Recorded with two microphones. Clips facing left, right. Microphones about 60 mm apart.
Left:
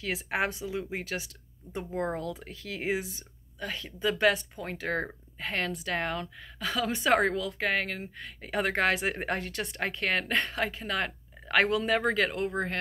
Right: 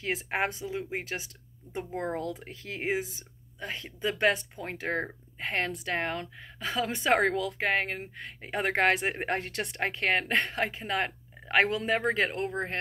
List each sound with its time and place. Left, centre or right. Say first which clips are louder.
0.0 s a woman's voice: even; right
2.1 s a woman's voice: right 1 dB; right